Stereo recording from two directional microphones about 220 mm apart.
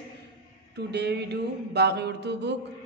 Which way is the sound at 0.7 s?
50° right (ahead or behind).